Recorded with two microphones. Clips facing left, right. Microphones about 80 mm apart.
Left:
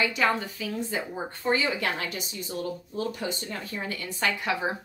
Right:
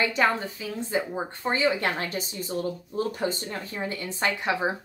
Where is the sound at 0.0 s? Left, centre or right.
Right.